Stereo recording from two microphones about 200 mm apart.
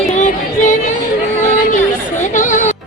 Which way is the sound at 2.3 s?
40° left (ahead or behind).